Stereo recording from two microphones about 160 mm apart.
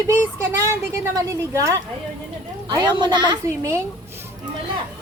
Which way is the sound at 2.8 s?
30° right (ahead or behind).